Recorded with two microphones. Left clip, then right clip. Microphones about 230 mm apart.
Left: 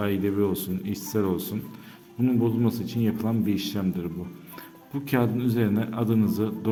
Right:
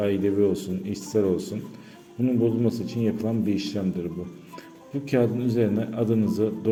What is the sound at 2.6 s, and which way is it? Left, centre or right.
A man's voice, centre.